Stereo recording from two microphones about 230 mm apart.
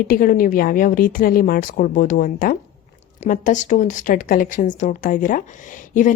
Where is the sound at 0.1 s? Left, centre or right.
Left.